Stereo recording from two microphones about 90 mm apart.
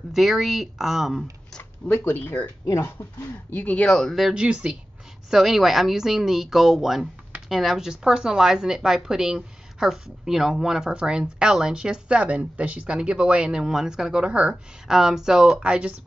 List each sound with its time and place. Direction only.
0.1 s speech: centre (ahead or behind)
1.6 s speech: 20° left (ahead or behind)
3.8 s speech: centre (ahead or behind)